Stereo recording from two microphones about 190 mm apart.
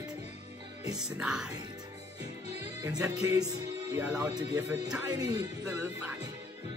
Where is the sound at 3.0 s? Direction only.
15° right (ahead or behind).